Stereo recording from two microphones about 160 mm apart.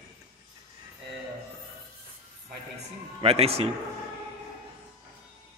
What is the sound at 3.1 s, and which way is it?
Speech, 40° right (ahead or behind).